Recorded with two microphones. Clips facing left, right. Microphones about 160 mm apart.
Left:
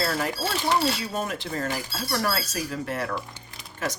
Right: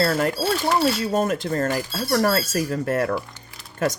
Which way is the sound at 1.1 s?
45° right (ahead or behind).